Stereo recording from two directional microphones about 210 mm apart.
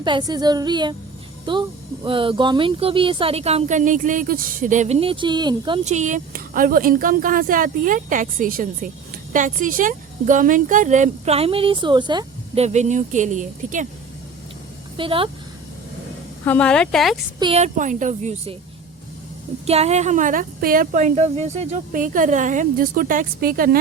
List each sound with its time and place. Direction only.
0.0 s speech: 20° right (ahead or behind)
2.0 s speech: 25° right (ahead or behind)
5.8 s speech: 35° right (ahead or behind)
12.6 s speech: 35° right (ahead or behind)
14.9 s speech: 25° right (ahead or behind)
16.4 s speech: 5° left (ahead or behind)
17.4 s speech: 30° right (ahead or behind)
19.6 s speech: 30° right (ahead or behind)